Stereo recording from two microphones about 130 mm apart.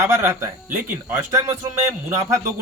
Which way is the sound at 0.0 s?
20° right (ahead or behind).